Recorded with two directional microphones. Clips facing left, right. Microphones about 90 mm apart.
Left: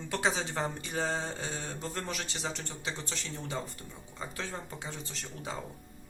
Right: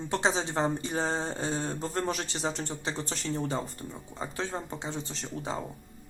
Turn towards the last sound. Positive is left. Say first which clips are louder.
# right 5 dB
turn(degrees=-30)  # may be behind; listen again after turning